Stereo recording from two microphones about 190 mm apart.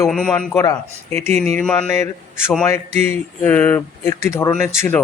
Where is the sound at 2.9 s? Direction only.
35° right (ahead or behind).